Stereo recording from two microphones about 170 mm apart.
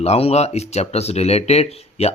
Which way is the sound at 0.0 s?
35° left (ahead or behind).